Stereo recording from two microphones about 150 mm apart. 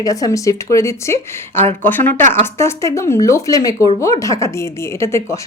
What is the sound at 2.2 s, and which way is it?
Speech, 55° right (ahead or behind).